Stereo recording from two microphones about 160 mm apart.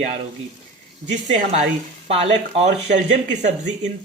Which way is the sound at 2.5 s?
45° right (ahead or behind).